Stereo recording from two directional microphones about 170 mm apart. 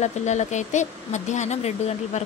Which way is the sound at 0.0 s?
45° left (ahead or behind).